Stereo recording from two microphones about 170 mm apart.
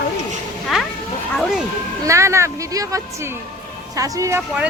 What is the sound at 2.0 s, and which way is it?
A woman's voice, 15° right (ahead or behind).